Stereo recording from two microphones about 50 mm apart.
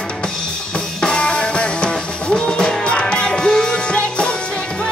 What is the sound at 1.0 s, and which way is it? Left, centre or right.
Music, centre.